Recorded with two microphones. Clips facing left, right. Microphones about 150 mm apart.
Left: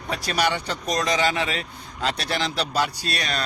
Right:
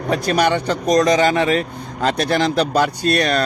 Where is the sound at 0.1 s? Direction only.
50° right (ahead or behind).